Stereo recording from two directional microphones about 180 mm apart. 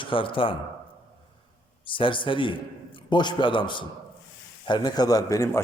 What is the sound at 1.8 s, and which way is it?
A man's voice, 30° left (ahead or behind).